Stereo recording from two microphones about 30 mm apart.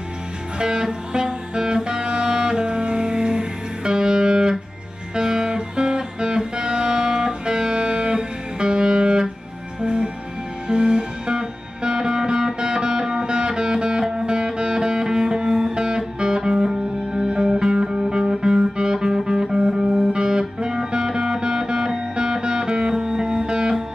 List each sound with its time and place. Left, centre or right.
0.6 s music: right